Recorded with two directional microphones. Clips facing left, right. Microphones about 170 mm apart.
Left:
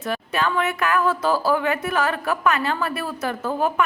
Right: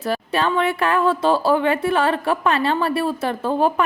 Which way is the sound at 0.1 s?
30° right (ahead or behind).